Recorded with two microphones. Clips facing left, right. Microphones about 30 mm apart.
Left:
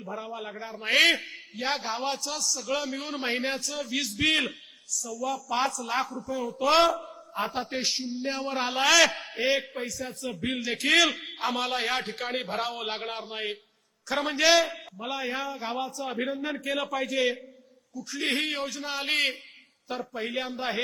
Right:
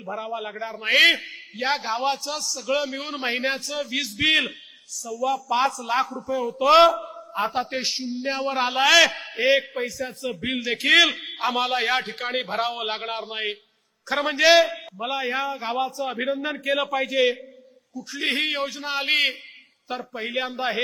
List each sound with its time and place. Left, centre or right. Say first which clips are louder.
0.0 s a man's voice: right 6 dB; right